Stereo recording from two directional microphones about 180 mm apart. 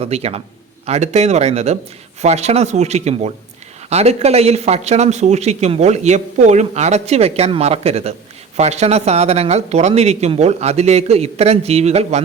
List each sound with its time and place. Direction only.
0.0 s speech: 35° right (ahead or behind)